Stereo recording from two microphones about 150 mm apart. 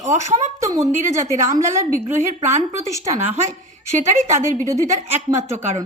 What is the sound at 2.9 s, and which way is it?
Speech, 20° right (ahead or behind).